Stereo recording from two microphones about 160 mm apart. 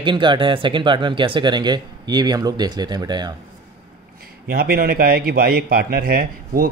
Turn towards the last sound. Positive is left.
turn(degrees=-70)  # may be behind; listen again after turning